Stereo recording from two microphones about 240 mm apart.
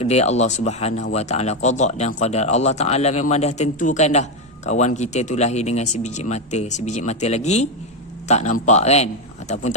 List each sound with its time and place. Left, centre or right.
0.0 s speech: left